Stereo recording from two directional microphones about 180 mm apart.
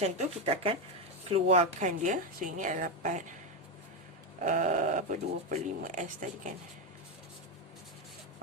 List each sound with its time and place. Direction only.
0.0 s speech: 35° right (ahead or behind)
4.4 s speech: 45° right (ahead or behind)